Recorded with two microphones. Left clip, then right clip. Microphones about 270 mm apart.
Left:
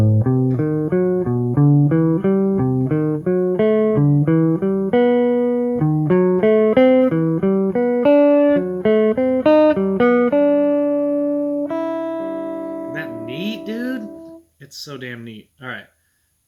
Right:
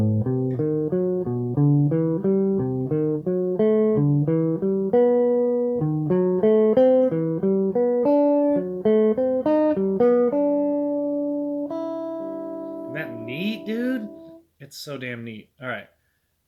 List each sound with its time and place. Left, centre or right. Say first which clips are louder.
0.0 s music: left 5 dB; left
12.9 s music: left 4 dB; centre